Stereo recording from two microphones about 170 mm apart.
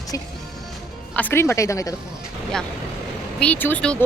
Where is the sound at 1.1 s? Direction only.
10° left (ahead or behind).